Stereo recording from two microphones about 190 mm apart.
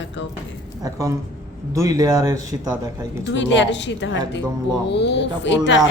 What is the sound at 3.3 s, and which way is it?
A woman's voice, 70° left (ahead or behind).